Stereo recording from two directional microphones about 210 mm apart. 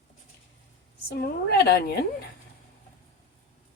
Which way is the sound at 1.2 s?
50° left (ahead or behind).